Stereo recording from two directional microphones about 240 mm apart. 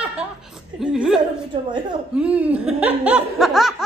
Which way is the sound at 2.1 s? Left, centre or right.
Centre.